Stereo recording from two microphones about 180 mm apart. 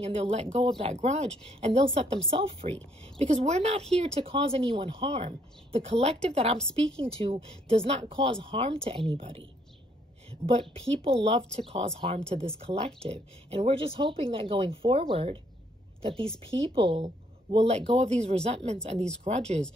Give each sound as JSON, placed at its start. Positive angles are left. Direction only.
{"t": 0.0, "sound": "a woman's voice", "side_deg": -35}